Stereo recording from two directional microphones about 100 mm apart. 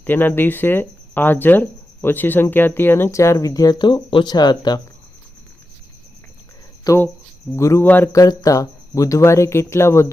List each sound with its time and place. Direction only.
0.0 s speech: 20° left (ahead or behind); by 4.8 s 45° left (ahead or behind)
7.5 s speech: 30° left (ahead or behind)
8.1 s speech: 40° left (ahead or behind)